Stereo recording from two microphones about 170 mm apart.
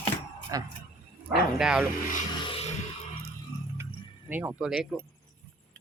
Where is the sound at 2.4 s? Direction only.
30° left (ahead or behind).